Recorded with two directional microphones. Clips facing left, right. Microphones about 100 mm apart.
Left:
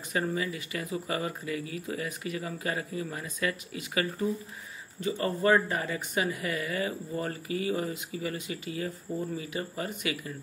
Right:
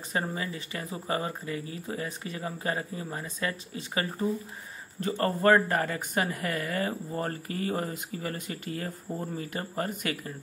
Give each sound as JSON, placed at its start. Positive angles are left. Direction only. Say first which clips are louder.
{"t": 0.1, "sound": "speech", "louder": "left 2 dB", "side_deg": -30}
{"t": 5.0, "sound": "speech", "louder": "right 2 dB", "side_deg": -50}